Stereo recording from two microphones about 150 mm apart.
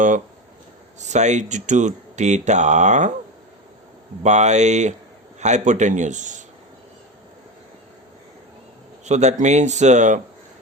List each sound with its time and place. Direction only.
0.9 s speech: 50° right (ahead or behind)
4.2 s speech: 50° right (ahead or behind)
9.0 s speech: 50° right (ahead or behind)